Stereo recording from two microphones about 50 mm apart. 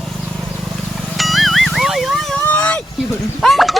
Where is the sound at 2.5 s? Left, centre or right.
Left.